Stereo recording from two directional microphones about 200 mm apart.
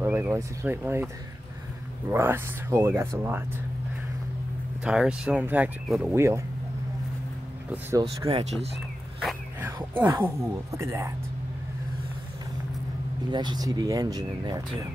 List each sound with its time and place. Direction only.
0.0 s speech: 10° right (ahead or behind)
2.0 s speech: 10° right (ahead or behind)
4.8 s speech: 5° right (ahead or behind)
7.7 s speech: 15° right (ahead or behind)
8.3 s speech: 30° right (ahead or behind)
9.6 s speech: 10° right (ahead or behind)
13.3 s speech: 20° right (ahead or behind)